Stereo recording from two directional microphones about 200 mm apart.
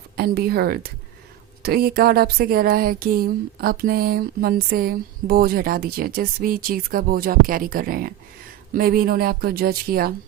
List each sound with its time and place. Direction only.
0.2 s speech: 50° right (ahead or behind)